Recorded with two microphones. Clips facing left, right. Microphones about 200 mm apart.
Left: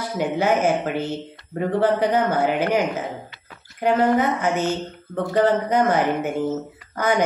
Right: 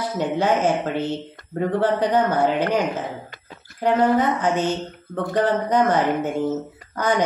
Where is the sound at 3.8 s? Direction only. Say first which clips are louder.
Even; 10° left (ahead or behind).